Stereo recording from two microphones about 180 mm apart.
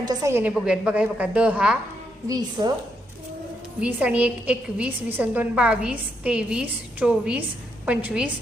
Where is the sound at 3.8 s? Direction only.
5° right (ahead or behind).